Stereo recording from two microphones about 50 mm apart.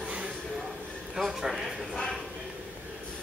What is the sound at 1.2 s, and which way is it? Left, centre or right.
A man's voice, centre.